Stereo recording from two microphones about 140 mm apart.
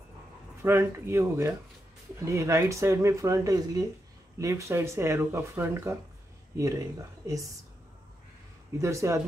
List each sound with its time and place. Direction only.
0.6 s speech: 20° right (ahead or behind)
8.8 s speech: 20° right (ahead or behind)